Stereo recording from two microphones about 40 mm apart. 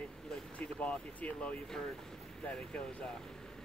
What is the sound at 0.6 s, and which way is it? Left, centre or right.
Speech, left.